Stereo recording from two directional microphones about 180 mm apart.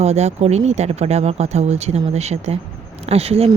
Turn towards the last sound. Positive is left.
turn(degrees=-35)  # may be behind; listen again after turning